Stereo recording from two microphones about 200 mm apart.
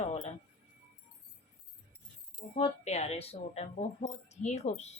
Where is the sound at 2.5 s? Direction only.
35° left (ahead or behind).